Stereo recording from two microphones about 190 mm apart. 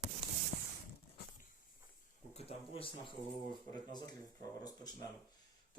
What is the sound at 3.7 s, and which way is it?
Speech, 20° left (ahead or behind).